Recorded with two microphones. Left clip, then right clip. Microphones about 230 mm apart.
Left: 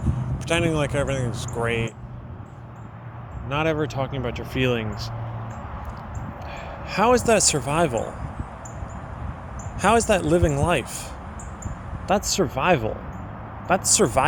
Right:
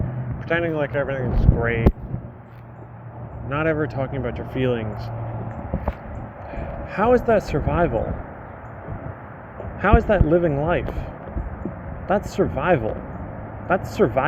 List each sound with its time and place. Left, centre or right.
0.4 s speech: left
1.2 s speech: left
1.6 s speech: left
3.5 s speech: left
6.5 s speech: left
9.8 s speech: left
12.4 s speech: left